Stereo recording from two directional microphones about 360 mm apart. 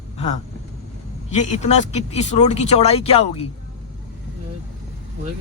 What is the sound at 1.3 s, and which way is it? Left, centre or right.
Speech, centre.